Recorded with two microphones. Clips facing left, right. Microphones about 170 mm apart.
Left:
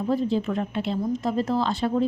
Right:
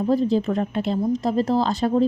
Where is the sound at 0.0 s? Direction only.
40° right (ahead or behind).